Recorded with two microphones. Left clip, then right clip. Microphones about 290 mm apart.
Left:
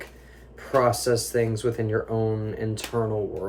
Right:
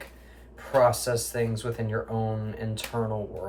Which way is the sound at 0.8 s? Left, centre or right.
Centre.